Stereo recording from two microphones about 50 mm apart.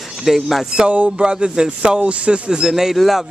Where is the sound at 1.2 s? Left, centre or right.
Centre.